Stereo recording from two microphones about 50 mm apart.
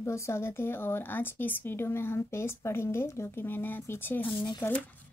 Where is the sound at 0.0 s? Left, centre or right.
Left.